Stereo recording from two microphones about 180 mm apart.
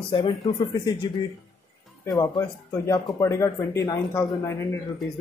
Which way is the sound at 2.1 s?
20° left (ahead or behind).